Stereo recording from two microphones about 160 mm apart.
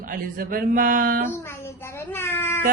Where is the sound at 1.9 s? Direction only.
15° left (ahead or behind).